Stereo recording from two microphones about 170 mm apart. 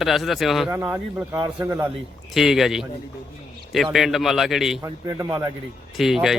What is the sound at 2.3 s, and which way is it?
Speech, centre (ahead or behind).